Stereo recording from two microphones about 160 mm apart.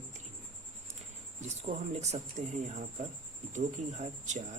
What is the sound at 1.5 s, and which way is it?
Speech, 45° right (ahead or behind).